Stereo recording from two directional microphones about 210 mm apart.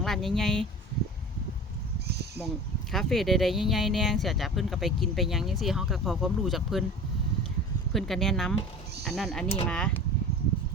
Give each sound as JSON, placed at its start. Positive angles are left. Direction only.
{"t": 0.0, "sound": "speech", "side_deg": 0}
{"t": 2.9, "sound": "speech", "side_deg": 0}
{"t": 7.9, "sound": "speech", "side_deg": 0}